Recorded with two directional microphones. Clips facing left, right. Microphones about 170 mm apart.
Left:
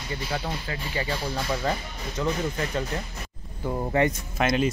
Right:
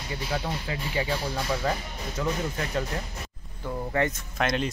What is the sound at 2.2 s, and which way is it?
Speech, centre (ahead or behind).